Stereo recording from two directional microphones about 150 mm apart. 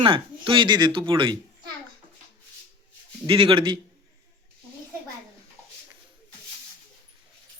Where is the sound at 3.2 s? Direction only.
35° right (ahead or behind).